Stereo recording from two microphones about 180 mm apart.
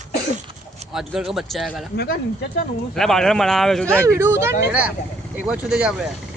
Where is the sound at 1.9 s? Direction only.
60° left (ahead or behind).